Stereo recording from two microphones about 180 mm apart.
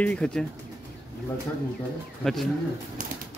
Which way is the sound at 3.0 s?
45° right (ahead or behind).